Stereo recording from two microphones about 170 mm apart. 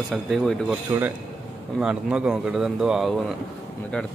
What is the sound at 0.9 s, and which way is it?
A man's voice, 15° right (ahead or behind).